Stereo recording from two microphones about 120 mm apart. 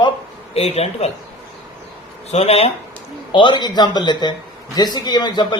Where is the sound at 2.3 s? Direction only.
55° left (ahead or behind).